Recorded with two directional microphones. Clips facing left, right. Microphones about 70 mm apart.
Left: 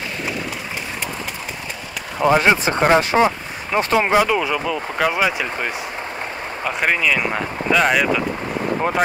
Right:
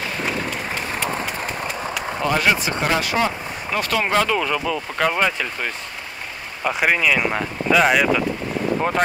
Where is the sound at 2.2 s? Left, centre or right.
Left; by 5.7 s centre.